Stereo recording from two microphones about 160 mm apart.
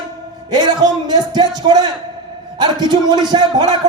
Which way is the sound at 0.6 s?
25° right (ahead or behind).